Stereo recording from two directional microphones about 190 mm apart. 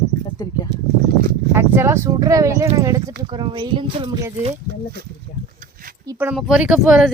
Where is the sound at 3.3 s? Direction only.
25° right (ahead or behind).